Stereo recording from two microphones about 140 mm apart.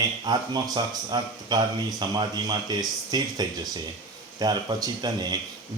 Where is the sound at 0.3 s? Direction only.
30° right (ahead or behind).